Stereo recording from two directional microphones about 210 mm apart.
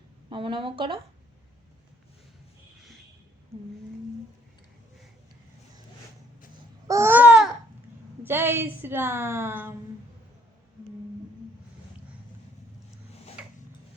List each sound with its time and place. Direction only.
0.3 s speech: 25° right (ahead or behind)
6.8 s babbling: 15° right (ahead or behind)
8.2 s a woman's voice: 10° right (ahead or behind)
13.4 s a sound: 5° right (ahead or behind)